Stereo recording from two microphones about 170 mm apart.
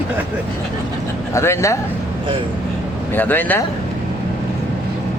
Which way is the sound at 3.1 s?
10° left (ahead or behind).